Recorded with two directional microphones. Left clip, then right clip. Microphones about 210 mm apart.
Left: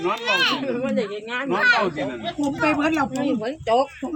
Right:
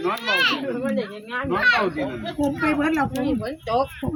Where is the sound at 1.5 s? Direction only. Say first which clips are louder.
Left 1 dB; 30° left (ahead or behind).